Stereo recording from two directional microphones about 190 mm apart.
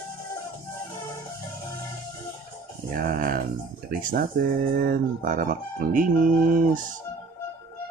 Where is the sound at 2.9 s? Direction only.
50° right (ahead or behind).